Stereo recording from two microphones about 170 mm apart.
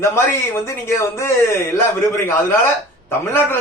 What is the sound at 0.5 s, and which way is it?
A man's voice, 15° left (ahead or behind).